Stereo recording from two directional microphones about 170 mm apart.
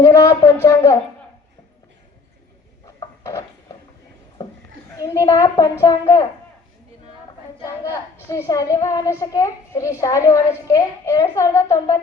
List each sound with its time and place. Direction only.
0.0 s speech: 20° left (ahead or behind)
2.8 s a sound: 15° left (ahead or behind)
4.9 s a child's voice: 20° left (ahead or behind)
8.4 s a child's voice: 20° left (ahead or behind)